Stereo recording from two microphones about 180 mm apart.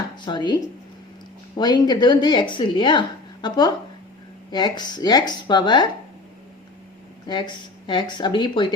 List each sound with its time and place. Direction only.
0.3 s speech: 25° left (ahead or behind)
7.3 s speech: 25° left (ahead or behind)